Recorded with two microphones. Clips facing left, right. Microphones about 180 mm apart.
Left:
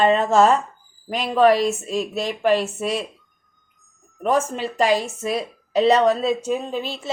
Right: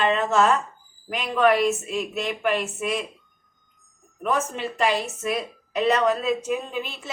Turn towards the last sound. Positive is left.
turn(degrees=35)  # may be behind; listen again after turning